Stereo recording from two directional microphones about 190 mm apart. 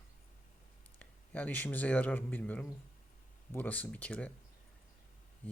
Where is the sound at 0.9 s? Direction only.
5° left (ahead or behind).